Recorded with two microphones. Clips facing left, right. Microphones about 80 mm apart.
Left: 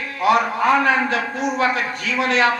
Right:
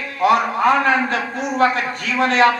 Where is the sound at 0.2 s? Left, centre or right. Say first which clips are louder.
Right 2 dB; right.